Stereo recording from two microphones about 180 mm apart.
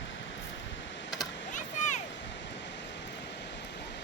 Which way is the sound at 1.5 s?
45° left (ahead or behind).